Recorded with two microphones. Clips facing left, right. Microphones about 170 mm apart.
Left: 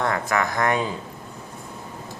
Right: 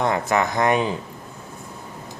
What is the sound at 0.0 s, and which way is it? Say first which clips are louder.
Speech: right 3 dB; 20° right (ahead or behind).